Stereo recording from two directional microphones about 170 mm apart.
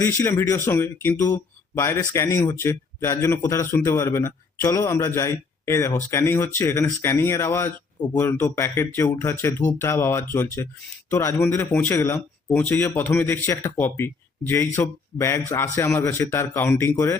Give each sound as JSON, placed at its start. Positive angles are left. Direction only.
{"t": 0.0, "sound": "speech", "side_deg": 15}